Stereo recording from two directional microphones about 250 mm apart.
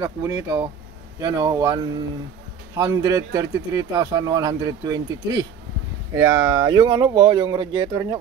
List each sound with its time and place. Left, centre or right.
0.0 s speech: centre
2.8 s speech: centre